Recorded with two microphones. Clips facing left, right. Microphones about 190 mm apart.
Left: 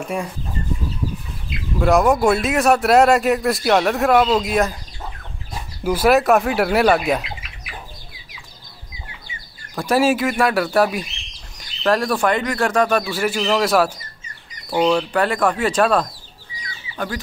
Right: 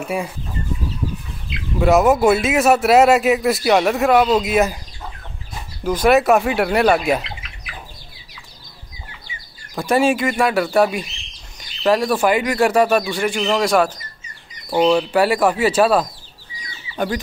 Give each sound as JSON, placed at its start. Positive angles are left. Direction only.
{"t": 0.0, "sound": "speech", "side_deg": -5}
{"t": 1.5, "sound": "speech", "side_deg": 0}
{"t": 5.9, "sound": "speech", "side_deg": 5}
{"t": 9.8, "sound": "speech", "side_deg": 0}
{"t": 16.9, "sound": "speech", "side_deg": -20}